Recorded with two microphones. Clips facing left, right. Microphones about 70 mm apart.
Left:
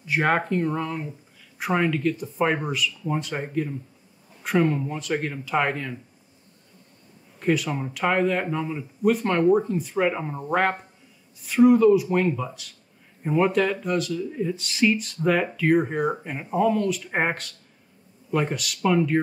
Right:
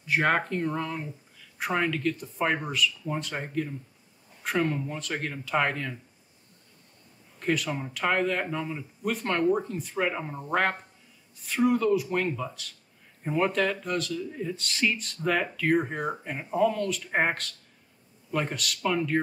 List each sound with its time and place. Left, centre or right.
0.0 s speech: centre
7.3 s speech: centre